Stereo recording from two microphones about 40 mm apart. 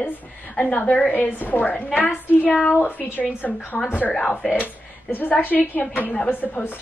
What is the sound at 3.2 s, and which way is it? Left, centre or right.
Speech, left.